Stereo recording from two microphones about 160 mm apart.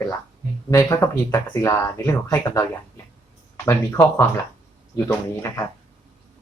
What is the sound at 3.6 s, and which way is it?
Speech, 15° left (ahead or behind).